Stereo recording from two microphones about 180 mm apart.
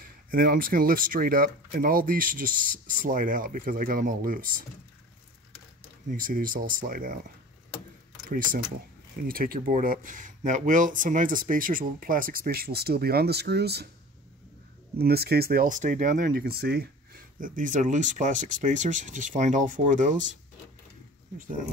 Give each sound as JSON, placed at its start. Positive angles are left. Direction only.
{"t": 0.3, "sound": "speech", "side_deg": -50}
{"t": 6.0, "sound": "speech", "side_deg": -50}
{"t": 9.3, "sound": "speech", "side_deg": -50}
{"t": 15.0, "sound": "speech", "side_deg": -60}